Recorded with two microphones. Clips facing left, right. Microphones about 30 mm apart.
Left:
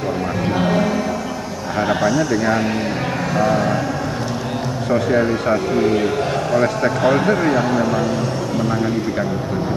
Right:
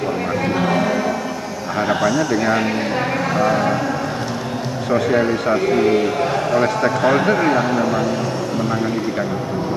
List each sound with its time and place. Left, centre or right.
1.8 s a man's voice: centre
4.9 s speech: centre